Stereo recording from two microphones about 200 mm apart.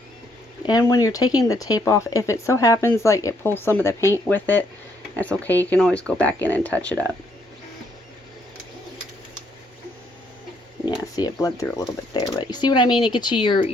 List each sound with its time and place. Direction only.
0.6 s speech: 20° left (ahead or behind)
10.8 s speech: 20° left (ahead or behind)